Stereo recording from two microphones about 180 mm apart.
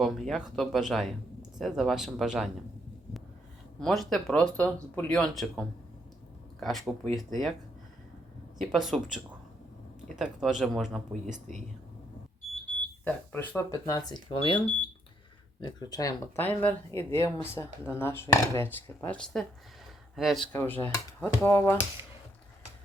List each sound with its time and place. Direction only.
0.0 s speech: centre (ahead or behind)
3.8 s speech: centre (ahead or behind)
8.5 s speech: centre (ahead or behind)
13.1 s speech: 10° left (ahead or behind)
14.1 s speech: 25° left (ahead or behind); by 20.4 s centre (ahead or behind)
20.5 s speech: 10° left (ahead or behind)